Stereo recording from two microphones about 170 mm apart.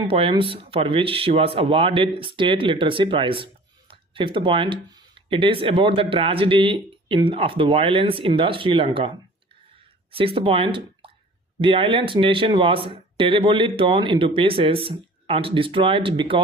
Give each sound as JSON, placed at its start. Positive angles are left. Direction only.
{"t": 0.1, "sound": "speech", "side_deg": -30}